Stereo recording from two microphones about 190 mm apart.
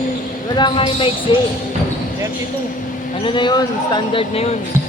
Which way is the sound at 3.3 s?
25° left (ahead or behind).